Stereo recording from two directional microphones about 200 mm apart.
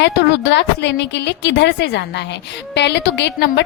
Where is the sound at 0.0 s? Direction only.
60° left (ahead or behind).